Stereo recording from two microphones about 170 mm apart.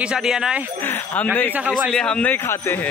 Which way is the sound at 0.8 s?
10° left (ahead or behind).